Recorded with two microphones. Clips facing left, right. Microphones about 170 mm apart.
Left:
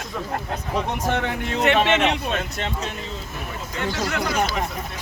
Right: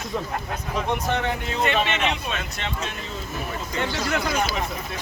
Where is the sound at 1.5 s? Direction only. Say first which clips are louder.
Left 6 dB; 70° left (ahead or behind); by 2.7 s 55° left (ahead or behind).